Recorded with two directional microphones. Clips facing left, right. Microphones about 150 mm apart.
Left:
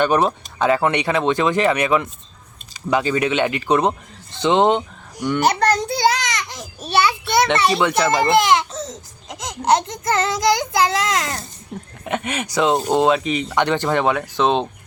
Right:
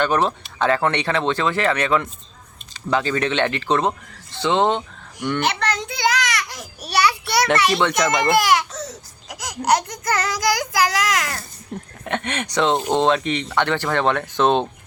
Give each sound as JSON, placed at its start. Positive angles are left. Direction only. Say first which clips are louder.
{"t": 0.0, "sound": "speech", "louder": "left 2 dB", "side_deg": 15}
{"t": 5.4, "sound": "a sound", "louder": "left 8 dB", "side_deg": 40}
{"t": 7.7, "sound": "speech", "louder": "left 1 dB", "side_deg": 5}
{"t": 8.1, "sound": "speech", "louder": "left 2 dB", "side_deg": 25}
{"t": 11.7, "sound": "speech", "louder": "left 1 dB", "side_deg": 5}